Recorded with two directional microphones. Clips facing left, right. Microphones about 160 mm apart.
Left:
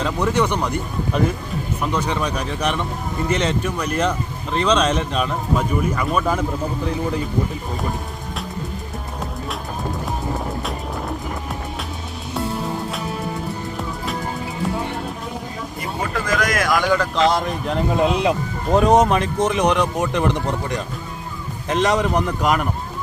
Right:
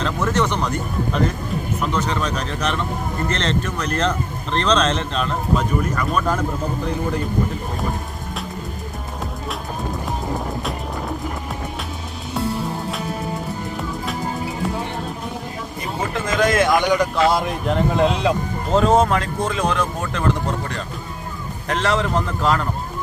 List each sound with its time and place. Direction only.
0.0 s speech: 10° left (ahead or behind)
1.8 s speech: 10° left (ahead or behind)
16.0 s a sound: 25° right (ahead or behind); by 18.1 s centre (ahead or behind)
18.7 s speech: 15° left (ahead or behind)